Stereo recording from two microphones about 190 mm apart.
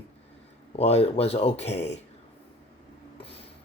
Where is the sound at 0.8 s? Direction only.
35° left (ahead or behind).